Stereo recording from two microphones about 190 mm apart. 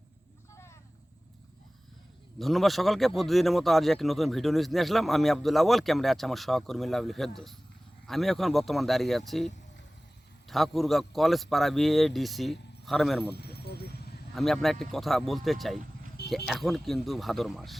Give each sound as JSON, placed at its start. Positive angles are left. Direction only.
{"t": 2.4, "sound": "a man's voice", "side_deg": 0}
{"t": 10.5, "sound": "a man's voice", "side_deg": 0}
{"t": 13.3, "sound": "a sound", "side_deg": 60}
{"t": 14.3, "sound": "a man's voice", "side_deg": 0}